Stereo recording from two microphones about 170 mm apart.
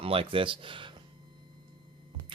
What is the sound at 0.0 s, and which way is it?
Speech, 35° right (ahead or behind).